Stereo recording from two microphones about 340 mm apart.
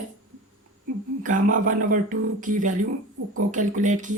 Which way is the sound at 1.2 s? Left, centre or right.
Right.